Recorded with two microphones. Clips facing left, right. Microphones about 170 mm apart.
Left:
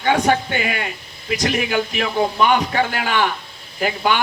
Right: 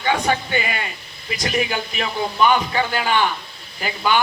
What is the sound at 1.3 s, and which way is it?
A man's voice, 60° left (ahead or behind).